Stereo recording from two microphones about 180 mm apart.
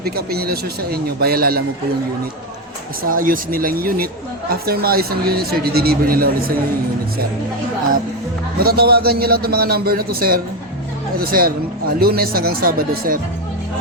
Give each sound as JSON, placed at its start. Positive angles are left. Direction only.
{"t": 0.0, "sound": "speech", "side_deg": -60}
{"t": 3.0, "sound": "speech", "side_deg": -50}
{"t": 8.5, "sound": "speech", "side_deg": -60}